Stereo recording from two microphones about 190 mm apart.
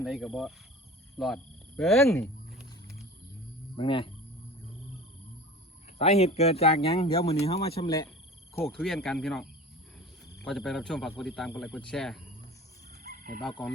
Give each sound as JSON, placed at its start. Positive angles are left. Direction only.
{"t": 0.0, "sound": "speech", "side_deg": 0}
{"t": 3.8, "sound": "speech", "side_deg": 25}
{"t": 6.0, "sound": "speech", "side_deg": 35}
{"t": 7.9, "sound": "speech", "side_deg": 15}
{"t": 8.6, "sound": "speech", "side_deg": 0}
{"t": 13.0, "sound": "fowl", "side_deg": -50}